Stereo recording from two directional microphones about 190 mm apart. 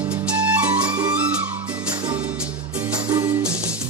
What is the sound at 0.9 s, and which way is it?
Music, 20° right (ahead or behind).